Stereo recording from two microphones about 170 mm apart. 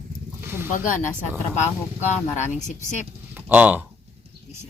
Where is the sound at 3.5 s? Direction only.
10° right (ahead or behind).